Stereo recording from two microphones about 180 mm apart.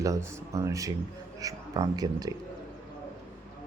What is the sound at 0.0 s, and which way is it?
A man's voice, 15° right (ahead or behind).